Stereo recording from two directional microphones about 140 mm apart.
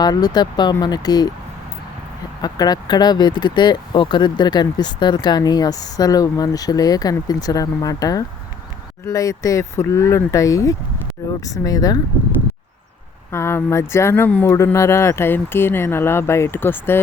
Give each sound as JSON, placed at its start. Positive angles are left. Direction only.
{"t": 0.0, "sound": "speech", "side_deg": 30}
{"t": 2.4, "sound": "speech", "side_deg": 30}
{"t": 13.3, "sound": "speech", "side_deg": 15}